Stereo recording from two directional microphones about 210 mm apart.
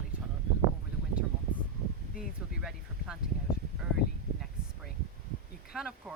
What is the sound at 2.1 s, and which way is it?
Speech, centre (ahead or behind).